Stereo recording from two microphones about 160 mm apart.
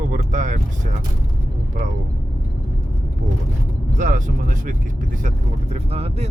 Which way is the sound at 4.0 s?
55° right (ahead or behind).